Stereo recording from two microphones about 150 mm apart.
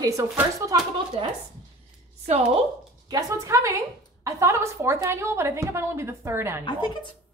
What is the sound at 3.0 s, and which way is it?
A woman's voice, 20° right (ahead or behind).